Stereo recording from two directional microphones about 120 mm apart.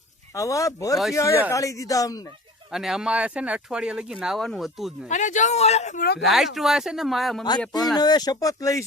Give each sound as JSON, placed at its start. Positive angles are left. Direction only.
{"t": 0.3, "sound": "speech", "side_deg": 25}
{"t": 2.7, "sound": "speech", "side_deg": -5}
{"t": 5.0, "sound": "speech", "side_deg": 90}
{"t": 6.2, "sound": "speech", "side_deg": 0}
{"t": 7.9, "sound": "speech", "side_deg": 35}